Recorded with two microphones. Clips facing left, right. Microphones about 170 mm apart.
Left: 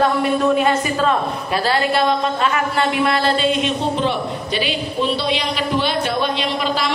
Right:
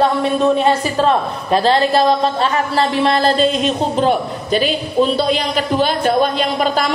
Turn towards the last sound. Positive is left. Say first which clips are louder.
# right 4 dB
turn(degrees=-45)  # may be behind; listen again after turning